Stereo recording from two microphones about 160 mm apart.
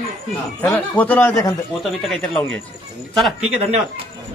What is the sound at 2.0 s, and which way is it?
A man's voice, centre (ahead or behind).